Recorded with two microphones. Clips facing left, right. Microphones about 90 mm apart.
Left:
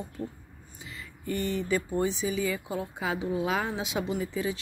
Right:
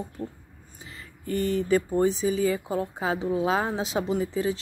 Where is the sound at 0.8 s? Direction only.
35° right (ahead or behind).